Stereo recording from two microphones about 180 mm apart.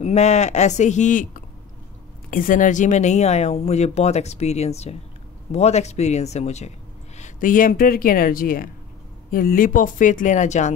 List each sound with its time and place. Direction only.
0.0 s speech: 40° left (ahead or behind)
2.3 s speech: 50° left (ahead or behind)